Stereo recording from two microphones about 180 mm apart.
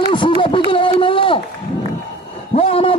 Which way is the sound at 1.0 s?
30° left (ahead or behind).